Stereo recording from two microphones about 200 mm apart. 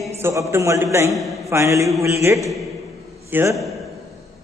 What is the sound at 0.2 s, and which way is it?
A man's voice, 10° right (ahead or behind).